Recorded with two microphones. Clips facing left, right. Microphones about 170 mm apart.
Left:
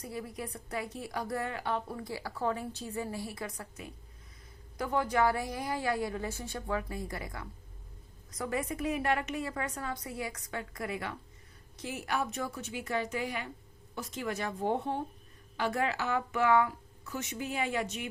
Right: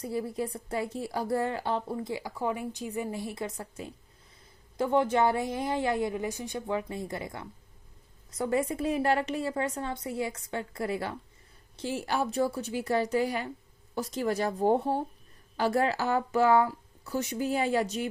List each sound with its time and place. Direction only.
0.0 s a woman's voice: 30° right (ahead or behind)